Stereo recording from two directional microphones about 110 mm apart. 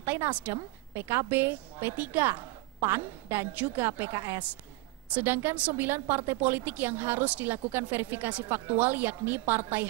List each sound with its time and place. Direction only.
0.0 s a woman's voice: 20° right (ahead or behind)